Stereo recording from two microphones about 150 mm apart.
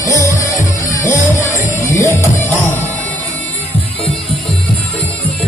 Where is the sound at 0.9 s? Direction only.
20° left (ahead or behind).